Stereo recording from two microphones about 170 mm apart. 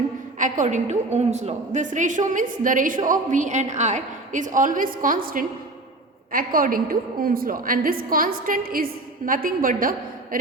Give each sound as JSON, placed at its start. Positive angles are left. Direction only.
{"t": 0.3, "sound": "a woman's voice", "side_deg": -50}